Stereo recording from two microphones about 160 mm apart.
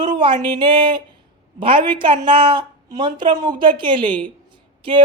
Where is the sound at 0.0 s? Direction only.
30° right (ahead or behind).